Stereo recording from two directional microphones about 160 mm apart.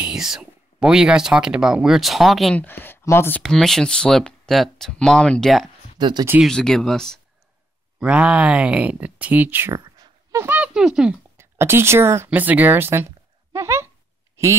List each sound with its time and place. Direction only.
0.0 s speech: 5° right (ahead or behind)
5.9 s speech: 30° right (ahead or behind)
6.4 s speech: 5° left (ahead or behind)
11.3 s speech: 15° right (ahead or behind)
14.4 s a sound: 20° right (ahead or behind)